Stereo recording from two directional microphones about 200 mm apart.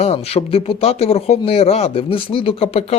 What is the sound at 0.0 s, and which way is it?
Speech, 30° left (ahead or behind).